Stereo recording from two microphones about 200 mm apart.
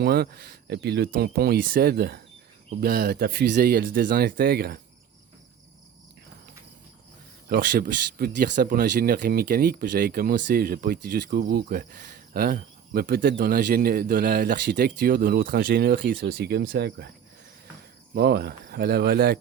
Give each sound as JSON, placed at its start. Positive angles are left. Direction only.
{"t": 0.0, "sound": "speech", "side_deg": -50}
{"t": 7.4, "sound": "speech", "side_deg": -45}
{"t": 18.1, "sound": "speech", "side_deg": -55}